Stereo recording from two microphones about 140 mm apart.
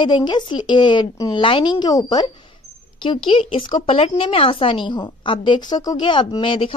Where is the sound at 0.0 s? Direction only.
35° left (ahead or behind).